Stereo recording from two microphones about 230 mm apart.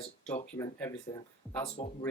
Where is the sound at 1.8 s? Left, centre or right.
Left.